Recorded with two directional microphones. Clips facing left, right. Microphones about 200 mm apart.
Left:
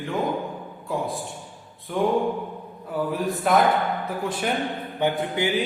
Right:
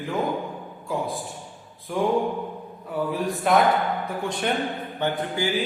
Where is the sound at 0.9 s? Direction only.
Centre (ahead or behind).